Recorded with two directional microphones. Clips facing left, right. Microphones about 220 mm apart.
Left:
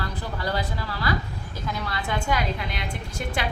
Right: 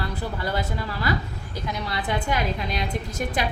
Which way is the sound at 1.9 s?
20° right (ahead or behind).